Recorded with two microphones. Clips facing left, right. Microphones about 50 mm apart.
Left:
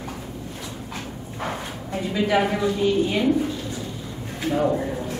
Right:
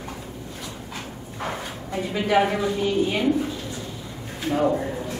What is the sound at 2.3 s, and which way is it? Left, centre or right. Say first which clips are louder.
Speech: right 2 dB; centre.